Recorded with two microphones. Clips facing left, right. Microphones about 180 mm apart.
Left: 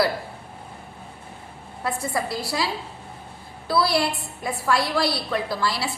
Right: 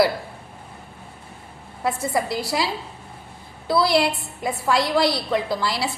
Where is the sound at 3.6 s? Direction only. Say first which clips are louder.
Right 3 dB; 20° right (ahead or behind).